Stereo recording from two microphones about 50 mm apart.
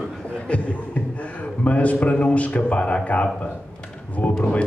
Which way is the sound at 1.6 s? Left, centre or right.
Left.